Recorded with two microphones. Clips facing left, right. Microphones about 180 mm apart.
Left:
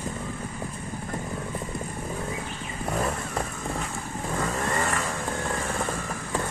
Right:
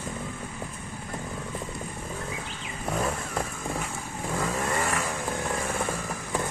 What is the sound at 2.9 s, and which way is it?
Vehicle, centre (ahead or behind).